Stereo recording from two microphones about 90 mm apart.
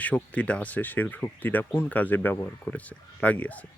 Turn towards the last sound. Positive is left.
turn(degrees=15)  # may be behind; listen again after turning